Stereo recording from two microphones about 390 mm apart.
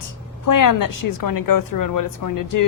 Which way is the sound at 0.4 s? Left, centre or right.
Left.